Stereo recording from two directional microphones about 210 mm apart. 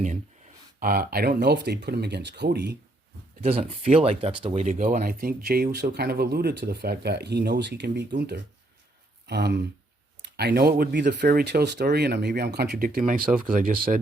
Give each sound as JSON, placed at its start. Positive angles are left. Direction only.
{"t": 0.8, "sound": "speech", "side_deg": -45}
{"t": 3.4, "sound": "speech", "side_deg": -30}
{"t": 9.2, "sound": "speech", "side_deg": -50}